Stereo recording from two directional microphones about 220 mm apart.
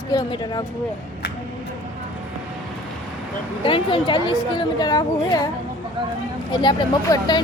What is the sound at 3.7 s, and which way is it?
A woman's voice, 25° left (ahead or behind).